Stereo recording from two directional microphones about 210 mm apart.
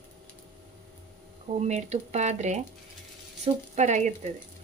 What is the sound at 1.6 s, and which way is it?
Speech, 30° right (ahead or behind).